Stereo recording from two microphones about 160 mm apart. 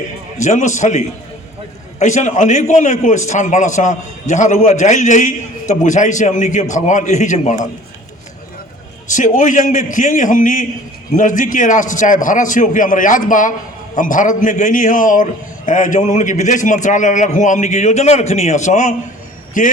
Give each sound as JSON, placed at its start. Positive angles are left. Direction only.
{"t": 0.3, "sound": "a man's voice", "side_deg": 45}
{"t": 9.0, "sound": "a man's voice", "side_deg": 50}